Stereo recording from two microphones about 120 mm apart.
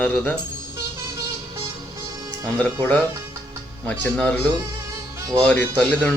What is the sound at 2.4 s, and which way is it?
Speech, 10° left (ahead or behind).